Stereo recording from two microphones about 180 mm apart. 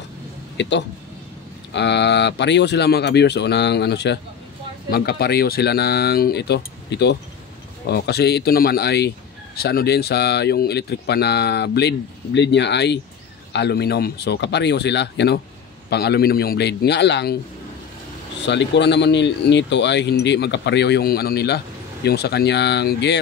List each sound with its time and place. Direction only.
0.6 s speech: 75° left (ahead or behind)
18.5 s speech: 75° left (ahead or behind)